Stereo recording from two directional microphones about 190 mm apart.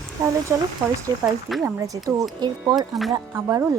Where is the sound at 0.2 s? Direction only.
20° right (ahead or behind).